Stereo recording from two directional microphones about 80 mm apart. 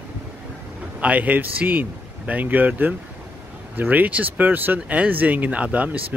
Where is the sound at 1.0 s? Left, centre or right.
Centre.